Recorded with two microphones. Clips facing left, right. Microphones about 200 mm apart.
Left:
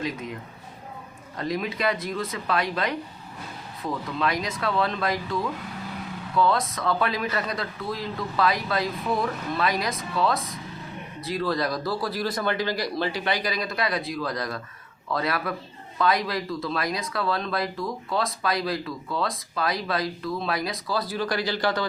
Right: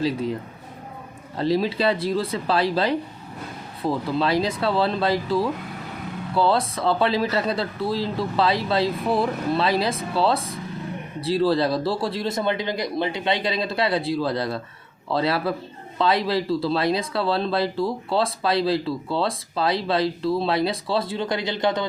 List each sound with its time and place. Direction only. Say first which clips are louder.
0.0 s speech: right 7 dB; 30° right (ahead or behind)
1.4 s speech: right 6 dB; 30° right (ahead or behind)